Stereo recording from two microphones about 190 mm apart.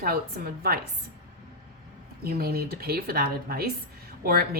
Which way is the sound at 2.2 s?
55° right (ahead or behind).